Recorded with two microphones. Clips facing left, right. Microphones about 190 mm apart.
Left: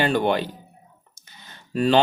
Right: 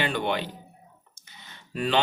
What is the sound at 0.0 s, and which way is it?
Speech, 40° left (ahead or behind).